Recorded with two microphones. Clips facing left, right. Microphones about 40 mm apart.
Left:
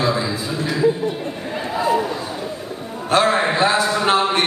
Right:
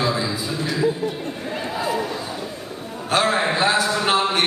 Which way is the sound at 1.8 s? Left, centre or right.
Centre.